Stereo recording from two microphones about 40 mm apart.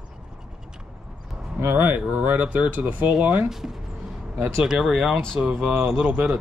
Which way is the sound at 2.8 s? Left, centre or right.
Right.